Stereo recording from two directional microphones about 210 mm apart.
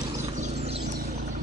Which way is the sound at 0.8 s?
45° right (ahead or behind).